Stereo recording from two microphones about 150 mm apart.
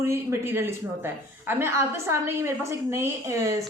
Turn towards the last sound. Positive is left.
turn(degrees=-20)  # may be behind; listen again after turning